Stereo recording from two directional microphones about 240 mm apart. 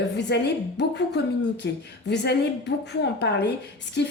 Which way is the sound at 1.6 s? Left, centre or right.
Left.